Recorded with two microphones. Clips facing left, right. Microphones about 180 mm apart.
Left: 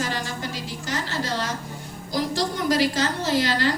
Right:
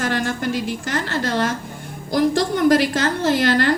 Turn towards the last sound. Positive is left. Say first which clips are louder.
# right 5 dB
turn(degrees=-55)  # may be behind; listen again after turning